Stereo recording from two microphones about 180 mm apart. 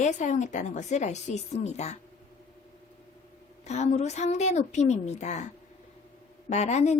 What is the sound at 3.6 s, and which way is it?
Speech, 40° left (ahead or behind).